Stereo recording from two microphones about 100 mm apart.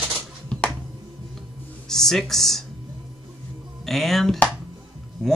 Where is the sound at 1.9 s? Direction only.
5° left (ahead or behind).